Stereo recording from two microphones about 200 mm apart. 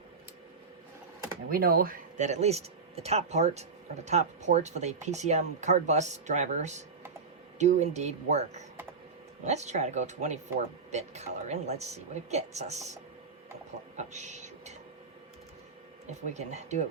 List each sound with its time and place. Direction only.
1.5 s speech: 45° right (ahead or behind)
16.3 s speech: 35° right (ahead or behind)